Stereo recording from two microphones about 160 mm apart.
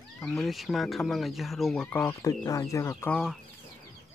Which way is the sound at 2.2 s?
20° left (ahead or behind).